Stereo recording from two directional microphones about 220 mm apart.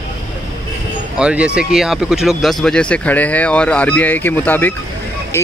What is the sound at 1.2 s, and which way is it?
Speech, 5° right (ahead or behind).